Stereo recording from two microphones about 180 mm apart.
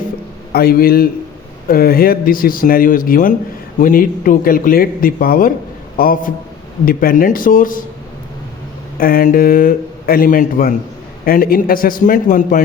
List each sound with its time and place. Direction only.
0.5 s a man's voice: 55° left (ahead or behind)
9.0 s speech: 50° left (ahead or behind)